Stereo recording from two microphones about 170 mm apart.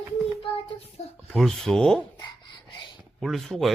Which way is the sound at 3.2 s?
Centre (ahead or behind).